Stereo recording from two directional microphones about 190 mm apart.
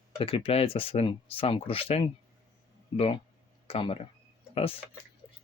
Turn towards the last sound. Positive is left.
turn(degrees=30)  # may be behind; listen again after turning